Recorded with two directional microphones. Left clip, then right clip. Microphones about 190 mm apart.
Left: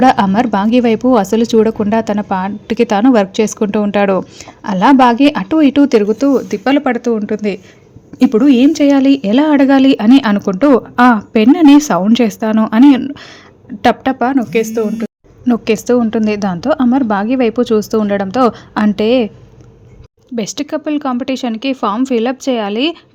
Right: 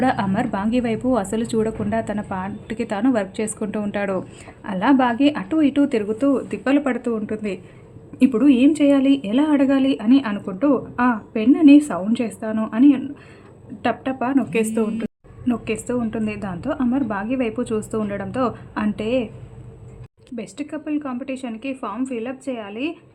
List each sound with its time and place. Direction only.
0.0 s a woman's voice: 30° left (ahead or behind)
15.4 s speech: 35° left (ahead or behind)
20.3 s a woman's voice: 45° left (ahead or behind)